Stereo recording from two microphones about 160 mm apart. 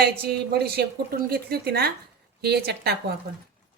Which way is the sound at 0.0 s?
80° right.